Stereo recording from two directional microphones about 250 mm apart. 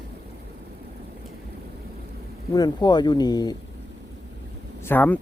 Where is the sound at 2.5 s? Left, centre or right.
Centre.